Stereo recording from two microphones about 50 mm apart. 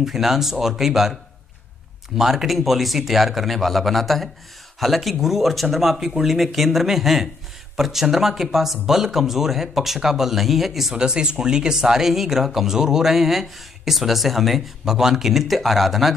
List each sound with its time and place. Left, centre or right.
0.0 s speech: centre
2.1 s speech: centre